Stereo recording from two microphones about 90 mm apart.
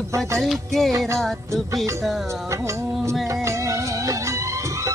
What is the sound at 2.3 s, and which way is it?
Music, 35° right (ahead or behind).